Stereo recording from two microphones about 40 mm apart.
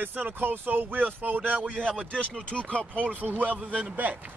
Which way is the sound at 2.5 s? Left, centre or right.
Left.